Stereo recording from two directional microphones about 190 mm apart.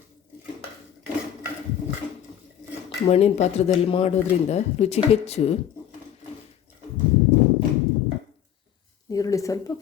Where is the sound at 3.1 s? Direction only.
35° left (ahead or behind).